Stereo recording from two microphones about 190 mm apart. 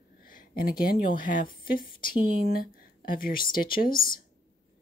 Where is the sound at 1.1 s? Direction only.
45° left (ahead or behind).